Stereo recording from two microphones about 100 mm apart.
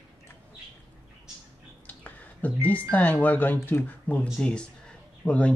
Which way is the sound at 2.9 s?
15° left (ahead or behind).